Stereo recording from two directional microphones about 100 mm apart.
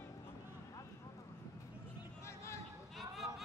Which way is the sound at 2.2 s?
30° left (ahead or behind).